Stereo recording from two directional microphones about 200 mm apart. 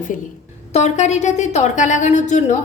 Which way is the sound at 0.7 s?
35° left (ahead or behind).